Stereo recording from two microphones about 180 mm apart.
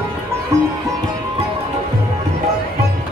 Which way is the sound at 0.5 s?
15° right (ahead or behind).